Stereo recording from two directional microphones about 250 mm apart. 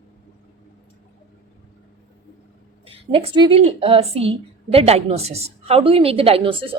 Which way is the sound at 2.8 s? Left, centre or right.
Right.